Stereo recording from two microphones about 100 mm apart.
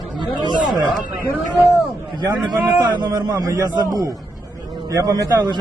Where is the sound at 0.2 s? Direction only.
50° right (ahead or behind).